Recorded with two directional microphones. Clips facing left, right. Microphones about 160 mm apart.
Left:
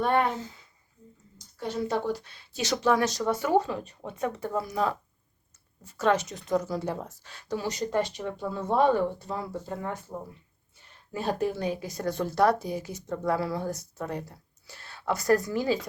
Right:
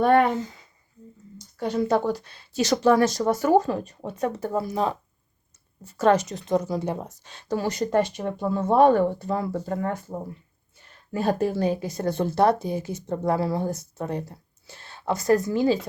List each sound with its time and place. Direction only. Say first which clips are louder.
0.0 s speech: right 6 dB; 60° right (ahead or behind)
2.6 s speech: right 6 dB; 40° right (ahead or behind)
6.0 s speech: right 5 dB; 40° right (ahead or behind); by 7.4 s 20° right (ahead or behind)
7.5 s speech: right 5 dB; 50° right (ahead or behind)
11.1 s a woman's voice: right 6 dB; 50° right (ahead or behind)
11.3 s speech: right 5 dB; 35° right (ahead or behind)